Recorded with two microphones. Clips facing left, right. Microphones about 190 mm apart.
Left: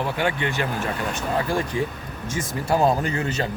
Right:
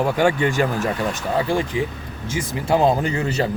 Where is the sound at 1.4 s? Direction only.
20° right (ahead or behind).